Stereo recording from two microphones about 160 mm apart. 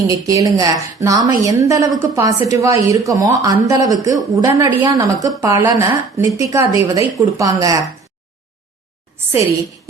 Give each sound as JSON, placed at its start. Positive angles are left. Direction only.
{"t": 0.1, "sound": "a woman's voice", "side_deg": -20}